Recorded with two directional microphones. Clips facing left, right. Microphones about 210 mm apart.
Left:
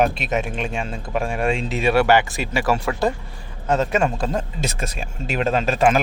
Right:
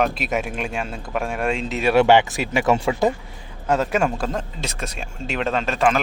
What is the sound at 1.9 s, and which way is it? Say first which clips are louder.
Speech: right 3 dB; 20° right (ahead or behind).